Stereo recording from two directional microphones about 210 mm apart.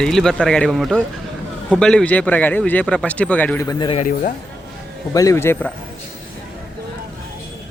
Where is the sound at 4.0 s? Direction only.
40° left (ahead or behind).